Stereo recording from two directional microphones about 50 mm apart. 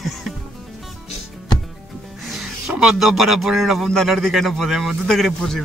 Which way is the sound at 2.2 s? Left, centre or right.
Centre.